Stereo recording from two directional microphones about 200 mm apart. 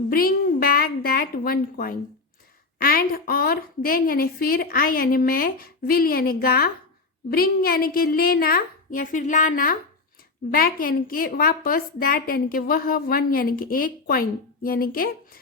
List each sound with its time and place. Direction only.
0.1 s a woman's voice: 45° left (ahead or behind)